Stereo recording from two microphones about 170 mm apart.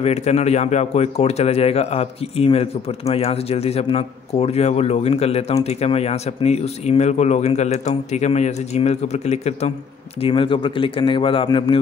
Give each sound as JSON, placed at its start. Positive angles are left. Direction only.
{"t": 0.0, "sound": "speech", "side_deg": 40}